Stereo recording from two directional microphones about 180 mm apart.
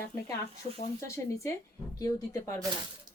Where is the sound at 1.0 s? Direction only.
15° left (ahead or behind).